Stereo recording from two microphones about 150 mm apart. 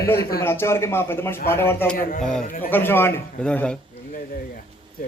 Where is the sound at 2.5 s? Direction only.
65° left (ahead or behind).